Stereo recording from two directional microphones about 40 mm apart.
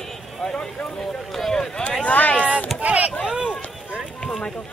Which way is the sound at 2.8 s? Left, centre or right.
Right.